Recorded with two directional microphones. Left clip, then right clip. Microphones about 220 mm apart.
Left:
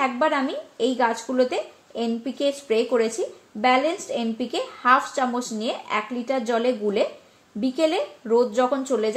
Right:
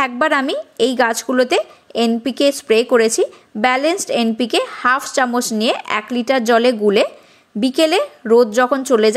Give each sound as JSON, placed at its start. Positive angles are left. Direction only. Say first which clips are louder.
{"t": 0.0, "sound": "a woman's voice", "louder": "right 6 dB", "side_deg": -35}